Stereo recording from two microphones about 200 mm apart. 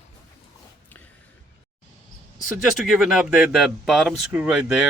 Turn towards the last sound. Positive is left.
turn(degrees=-5)  # may be behind; listen again after turning